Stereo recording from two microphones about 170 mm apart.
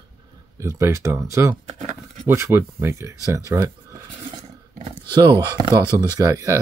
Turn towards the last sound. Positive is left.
turn(degrees=-20)  # may be behind; listen again after turning